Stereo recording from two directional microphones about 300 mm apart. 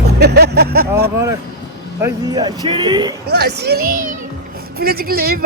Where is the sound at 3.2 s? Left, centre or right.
Right.